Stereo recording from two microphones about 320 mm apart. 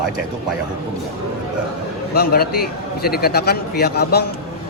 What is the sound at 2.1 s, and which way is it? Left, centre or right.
A man's voice, left.